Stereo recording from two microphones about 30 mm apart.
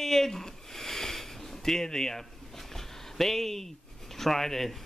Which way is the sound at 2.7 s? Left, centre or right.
Centre.